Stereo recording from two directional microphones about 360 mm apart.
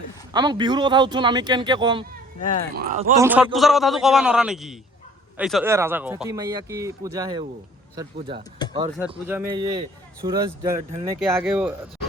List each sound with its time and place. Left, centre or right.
0.3 s speech: centre
3.2 s a man's voice: centre